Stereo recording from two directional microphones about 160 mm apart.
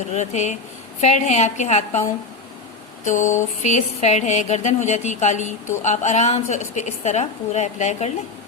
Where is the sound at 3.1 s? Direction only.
50° left (ahead or behind).